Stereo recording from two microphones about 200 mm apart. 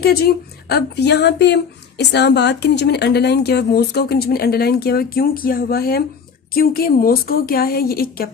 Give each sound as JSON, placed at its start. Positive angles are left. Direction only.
{"t": 0.0, "sound": "a woman's voice", "side_deg": 50}